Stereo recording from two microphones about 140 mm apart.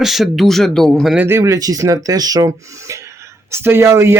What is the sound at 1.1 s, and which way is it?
Speech, 15° right (ahead or behind).